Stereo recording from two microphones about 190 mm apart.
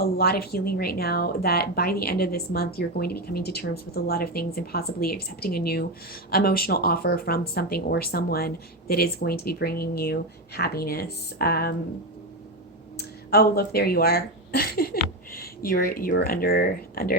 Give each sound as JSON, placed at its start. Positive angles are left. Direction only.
{"t": 0.0, "sound": "speech", "side_deg": 55}
{"t": 13.0, "sound": "speech", "side_deg": 55}